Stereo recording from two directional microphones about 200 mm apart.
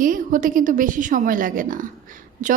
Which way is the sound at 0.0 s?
40° right (ahead or behind).